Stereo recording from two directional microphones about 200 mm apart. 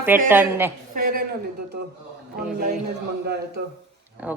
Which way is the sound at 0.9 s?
45° right (ahead or behind).